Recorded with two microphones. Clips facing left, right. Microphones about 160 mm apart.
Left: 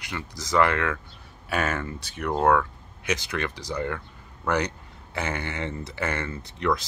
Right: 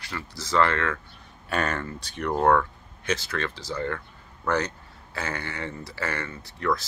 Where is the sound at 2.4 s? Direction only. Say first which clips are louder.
Even; 5° left (ahead or behind).